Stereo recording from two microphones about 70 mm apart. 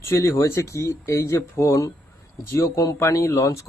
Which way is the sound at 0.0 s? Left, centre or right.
Left.